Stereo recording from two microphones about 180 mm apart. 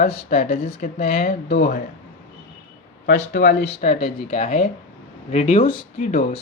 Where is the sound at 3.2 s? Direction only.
75° left (ahead or behind).